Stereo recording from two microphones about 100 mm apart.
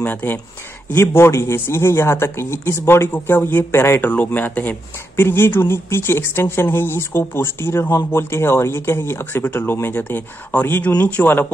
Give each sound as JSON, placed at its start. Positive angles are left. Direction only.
{"t": 0.0, "sound": "speech", "side_deg": 20}